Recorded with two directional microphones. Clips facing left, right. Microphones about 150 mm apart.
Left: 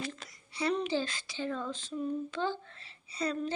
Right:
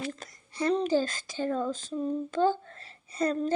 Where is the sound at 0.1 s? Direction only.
45° right (ahead or behind).